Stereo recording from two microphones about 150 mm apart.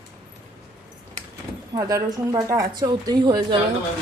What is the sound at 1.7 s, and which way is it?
A woman's voice, 25° right (ahead or behind).